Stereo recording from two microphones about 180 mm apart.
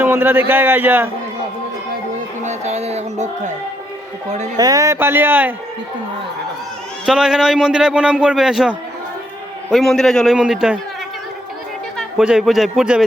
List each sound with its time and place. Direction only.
0.0 s a man's voice: 10° right (ahead or behind)
2.4 s music: 40° right (ahead or behind)
4.5 s a man's voice: 20° right (ahead or behind)
7.0 s speech: 5° right (ahead or behind)
11.9 s a man's voice: 5° right (ahead or behind)